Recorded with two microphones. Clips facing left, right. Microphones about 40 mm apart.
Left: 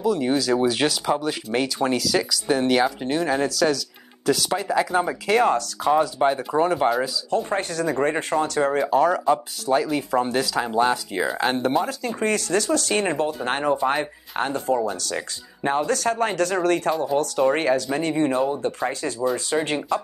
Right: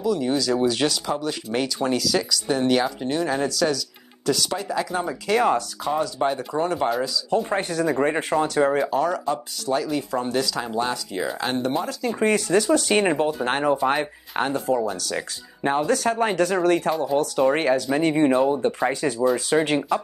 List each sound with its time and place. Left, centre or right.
0.0 s speech: centre
4.6 s speech: centre
5.3 s speech: centre
5.9 s speech: centre
7.2 s speech: centre
8.8 s speech: centre
12.0 s speech: centre
13.3 s speech: centre